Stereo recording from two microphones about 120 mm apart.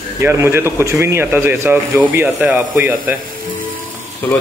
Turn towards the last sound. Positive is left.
turn(degrees=15)  # may be behind; listen again after turning